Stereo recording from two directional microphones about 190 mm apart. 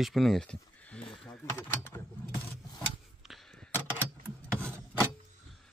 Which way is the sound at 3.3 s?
5° left (ahead or behind).